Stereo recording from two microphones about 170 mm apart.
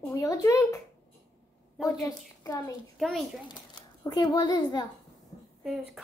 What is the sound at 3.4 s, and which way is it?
A child's voice, 25° left (ahead or behind).